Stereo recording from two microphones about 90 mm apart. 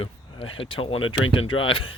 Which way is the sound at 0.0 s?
90° left.